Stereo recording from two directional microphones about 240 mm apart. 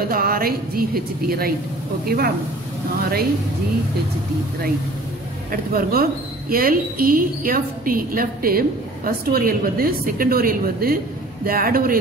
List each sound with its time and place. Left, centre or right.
0.1 s a woman's voice: right
5.5 s a woman's voice: right